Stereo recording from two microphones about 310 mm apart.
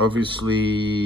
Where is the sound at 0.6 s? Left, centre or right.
Centre.